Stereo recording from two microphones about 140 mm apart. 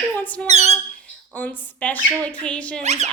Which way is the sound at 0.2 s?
10° left (ahead or behind).